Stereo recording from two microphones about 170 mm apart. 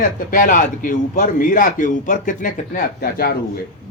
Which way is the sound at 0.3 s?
50° left (ahead or behind).